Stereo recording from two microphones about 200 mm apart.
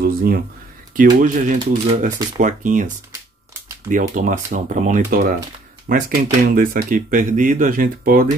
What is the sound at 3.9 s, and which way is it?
Speech, 40° right (ahead or behind).